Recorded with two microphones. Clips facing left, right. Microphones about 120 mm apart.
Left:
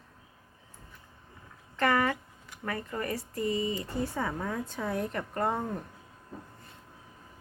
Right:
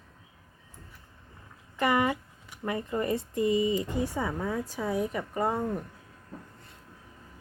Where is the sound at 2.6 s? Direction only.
15° right (ahead or behind).